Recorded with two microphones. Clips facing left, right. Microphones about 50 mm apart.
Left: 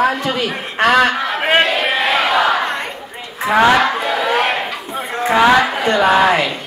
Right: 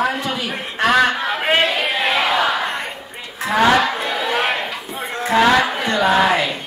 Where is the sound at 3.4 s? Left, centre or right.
Left.